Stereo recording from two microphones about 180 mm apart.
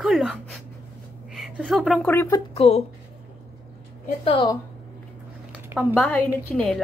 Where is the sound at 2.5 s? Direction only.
35° left (ahead or behind).